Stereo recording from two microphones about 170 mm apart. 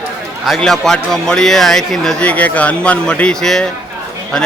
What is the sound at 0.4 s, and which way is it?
A man's voice, centre (ahead or behind).